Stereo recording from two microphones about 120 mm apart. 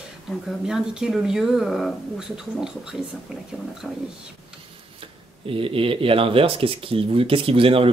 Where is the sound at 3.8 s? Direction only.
5° right (ahead or behind).